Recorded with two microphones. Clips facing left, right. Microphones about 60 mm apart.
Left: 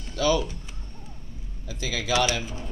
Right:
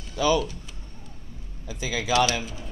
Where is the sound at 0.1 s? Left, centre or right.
Centre.